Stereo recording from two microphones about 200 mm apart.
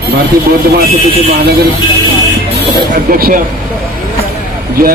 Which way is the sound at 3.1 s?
45° right (ahead or behind).